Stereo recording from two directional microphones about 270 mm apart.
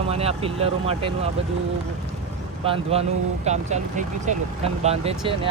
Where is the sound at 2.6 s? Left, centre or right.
Right.